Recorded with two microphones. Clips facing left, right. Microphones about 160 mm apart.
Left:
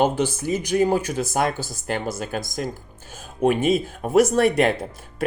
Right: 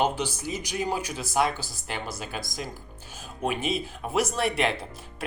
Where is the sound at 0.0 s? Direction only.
50° left (ahead or behind).